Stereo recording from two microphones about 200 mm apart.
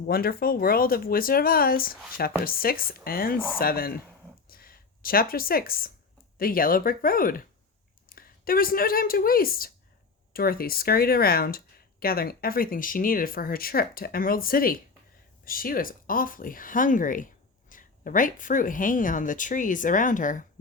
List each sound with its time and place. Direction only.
0.1 s speech: 50° left (ahead or behind)
4.4 s a sound: 45° left (ahead or behind)
6.3 s speech: 45° left (ahead or behind)